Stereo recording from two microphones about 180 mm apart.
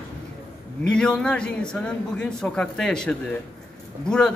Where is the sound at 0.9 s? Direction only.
5° left (ahead or behind).